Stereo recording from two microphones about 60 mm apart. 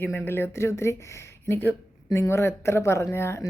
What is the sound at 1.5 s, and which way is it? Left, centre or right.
Speech, left.